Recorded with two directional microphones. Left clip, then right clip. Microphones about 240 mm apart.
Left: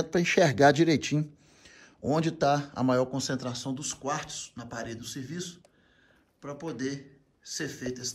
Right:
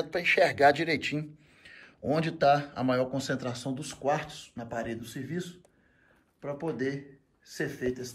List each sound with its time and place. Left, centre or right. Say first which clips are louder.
0.0 s speech: even; left; by 8.1 s centre